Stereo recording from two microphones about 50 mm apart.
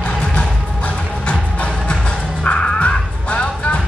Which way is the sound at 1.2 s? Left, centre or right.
Left.